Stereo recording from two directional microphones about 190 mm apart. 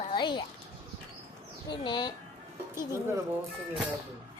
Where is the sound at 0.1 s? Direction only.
25° left (ahead or behind).